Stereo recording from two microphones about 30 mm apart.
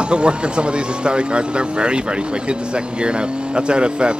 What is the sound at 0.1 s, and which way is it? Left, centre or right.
Speech, right.